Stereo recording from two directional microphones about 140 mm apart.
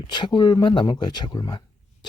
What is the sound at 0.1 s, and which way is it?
Speech, 30° left (ahead or behind).